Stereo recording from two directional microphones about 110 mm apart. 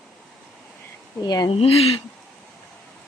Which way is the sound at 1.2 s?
40° left (ahead or behind).